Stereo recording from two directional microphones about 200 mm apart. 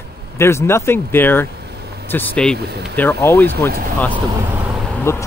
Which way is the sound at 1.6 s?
50° right (ahead or behind).